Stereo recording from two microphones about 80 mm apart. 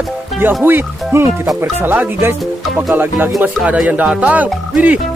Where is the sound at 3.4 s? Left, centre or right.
Centre.